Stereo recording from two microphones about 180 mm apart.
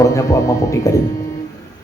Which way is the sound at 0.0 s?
15° left (ahead or behind).